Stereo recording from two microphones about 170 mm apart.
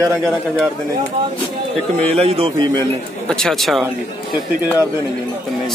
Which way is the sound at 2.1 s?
35° right (ahead or behind).